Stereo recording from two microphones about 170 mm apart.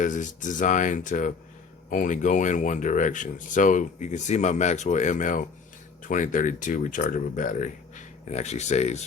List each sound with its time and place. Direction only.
0.0 s speech: 50° left (ahead or behind)